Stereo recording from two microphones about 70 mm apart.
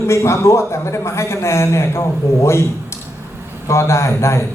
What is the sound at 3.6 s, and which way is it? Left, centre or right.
Speech, left.